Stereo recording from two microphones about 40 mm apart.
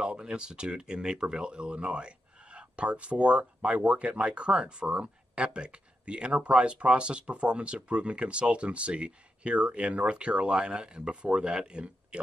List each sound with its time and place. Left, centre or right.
0.0 s speech: right